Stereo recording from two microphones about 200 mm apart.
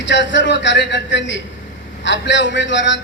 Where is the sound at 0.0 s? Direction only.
65° left (ahead or behind).